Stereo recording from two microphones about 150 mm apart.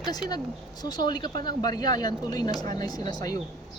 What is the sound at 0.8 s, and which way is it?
Speech, 25° left (ahead or behind).